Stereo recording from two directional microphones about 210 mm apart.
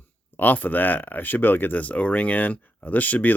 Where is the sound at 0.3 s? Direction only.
10° left (ahead or behind).